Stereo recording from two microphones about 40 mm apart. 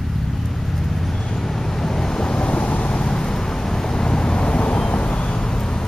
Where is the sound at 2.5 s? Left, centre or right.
Left.